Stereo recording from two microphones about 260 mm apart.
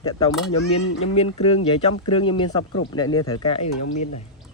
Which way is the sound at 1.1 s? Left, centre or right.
Left.